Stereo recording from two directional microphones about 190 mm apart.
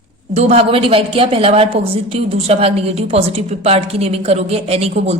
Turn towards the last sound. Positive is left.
turn(degrees=-35)  # may be behind; listen again after turning